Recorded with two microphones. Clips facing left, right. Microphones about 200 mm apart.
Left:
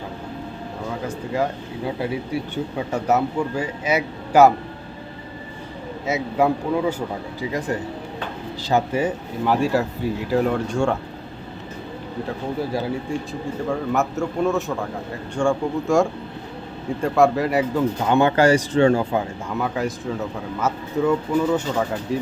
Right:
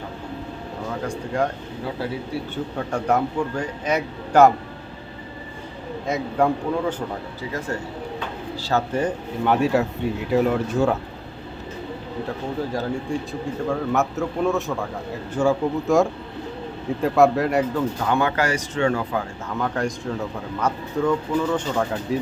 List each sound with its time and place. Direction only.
1.0 s speech: 5° left (ahead or behind)
2.3 s a man's voice: 15° left (ahead or behind)
6.1 s a man's voice: 5° left (ahead or behind)
12.7 s a man's voice: 10° left (ahead or behind)
18.0 s speech: 25° left (ahead or behind)
19.5 s speech: 5° left (ahead or behind)